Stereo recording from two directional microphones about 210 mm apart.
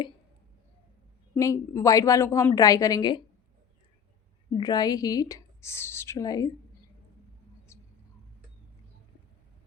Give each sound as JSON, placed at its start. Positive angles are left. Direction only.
{"t": 1.4, "sound": "speech", "side_deg": 15}
{"t": 4.5, "sound": "speech", "side_deg": 20}
{"t": 7.7, "sound": "a sound", "side_deg": 15}